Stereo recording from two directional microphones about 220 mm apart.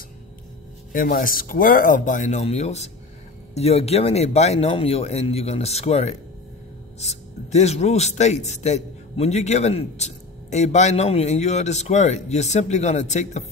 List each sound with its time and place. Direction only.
0.9 s speech: 40° left (ahead or behind)